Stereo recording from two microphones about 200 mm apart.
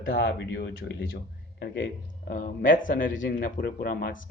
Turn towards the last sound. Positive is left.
turn(degrees=50)  # may be behind; listen again after turning